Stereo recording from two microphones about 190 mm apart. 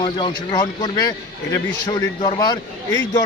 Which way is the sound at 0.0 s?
25° left (ahead or behind).